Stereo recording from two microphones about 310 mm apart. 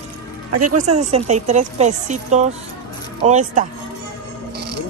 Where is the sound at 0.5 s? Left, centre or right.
Right.